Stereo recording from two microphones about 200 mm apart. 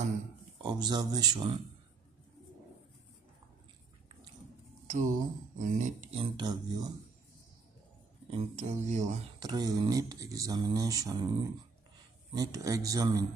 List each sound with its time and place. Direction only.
0.7 s speech: 20° right (ahead or behind)
4.8 s a sound: 40° right (ahead or behind)
5.6 s speech: 35° right (ahead or behind)
6.3 s speech: 20° right (ahead or behind)
8.3 s speech: 30° right (ahead or behind)
9.4 s a man's voice: 20° right (ahead or behind)